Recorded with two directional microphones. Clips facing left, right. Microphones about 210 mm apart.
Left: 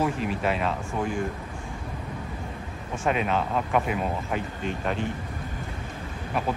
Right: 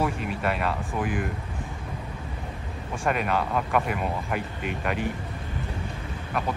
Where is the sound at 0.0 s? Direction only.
Centre (ahead or behind).